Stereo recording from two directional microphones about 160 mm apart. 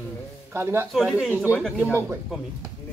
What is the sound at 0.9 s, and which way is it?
Speech, centre (ahead or behind).